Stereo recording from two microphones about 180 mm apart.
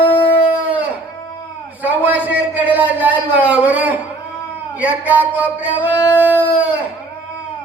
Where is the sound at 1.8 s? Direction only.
10° right (ahead or behind).